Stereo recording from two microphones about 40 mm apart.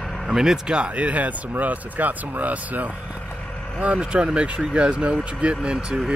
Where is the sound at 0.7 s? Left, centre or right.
Right.